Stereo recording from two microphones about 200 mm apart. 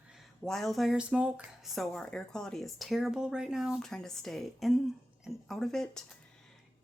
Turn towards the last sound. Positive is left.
turn(degrees=0)  # may be behind; listen again after turning